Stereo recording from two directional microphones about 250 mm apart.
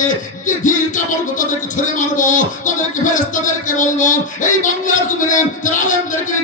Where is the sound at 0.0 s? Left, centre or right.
Left.